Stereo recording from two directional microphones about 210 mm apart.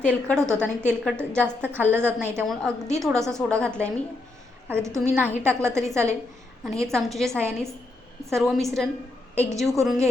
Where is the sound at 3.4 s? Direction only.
5° left (ahead or behind).